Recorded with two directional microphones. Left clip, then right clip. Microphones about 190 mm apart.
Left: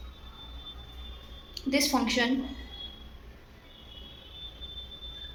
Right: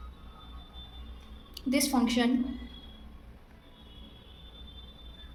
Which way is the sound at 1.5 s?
35° right (ahead or behind).